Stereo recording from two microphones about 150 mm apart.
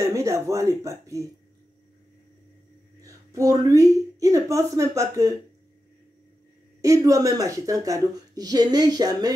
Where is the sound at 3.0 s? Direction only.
20° right (ahead or behind).